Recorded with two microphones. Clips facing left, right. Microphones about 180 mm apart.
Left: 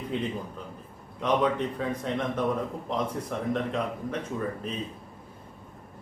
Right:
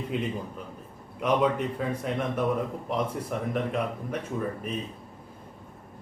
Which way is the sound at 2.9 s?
10° right (ahead or behind).